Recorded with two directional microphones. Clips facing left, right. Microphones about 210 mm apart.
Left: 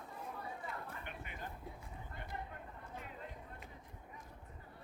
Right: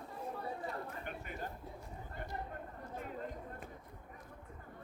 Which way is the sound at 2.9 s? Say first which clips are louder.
Right 7 dB; 45° right (ahead or behind).